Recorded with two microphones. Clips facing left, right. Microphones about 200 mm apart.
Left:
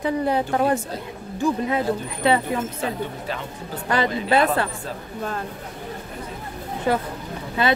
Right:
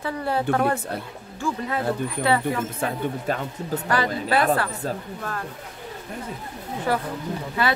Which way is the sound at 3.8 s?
20° left (ahead or behind).